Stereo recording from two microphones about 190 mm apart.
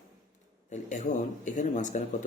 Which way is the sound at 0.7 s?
40° left (ahead or behind).